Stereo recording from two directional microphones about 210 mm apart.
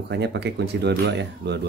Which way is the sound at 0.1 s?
55° right (ahead or behind).